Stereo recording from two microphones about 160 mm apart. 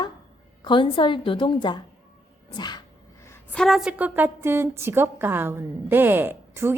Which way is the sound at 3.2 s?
10° left (ahead or behind).